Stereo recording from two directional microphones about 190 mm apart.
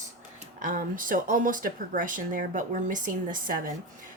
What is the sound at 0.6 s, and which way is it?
Speech, 45° right (ahead or behind).